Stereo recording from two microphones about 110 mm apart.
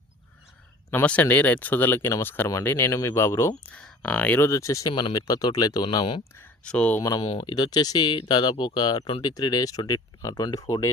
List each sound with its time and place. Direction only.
0.9 s speech: 15° left (ahead or behind)
3.7 s speech: 10° left (ahead or behind)
4.4 s speech: 30° left (ahead or behind)
6.7 s speech: 15° left (ahead or behind)
7.0 s speech: 40° left (ahead or behind)
9.3 s speech: 35° left (ahead or behind)